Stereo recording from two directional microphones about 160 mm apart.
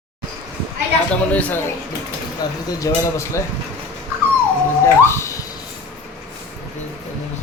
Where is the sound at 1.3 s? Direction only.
10° left (ahead or behind).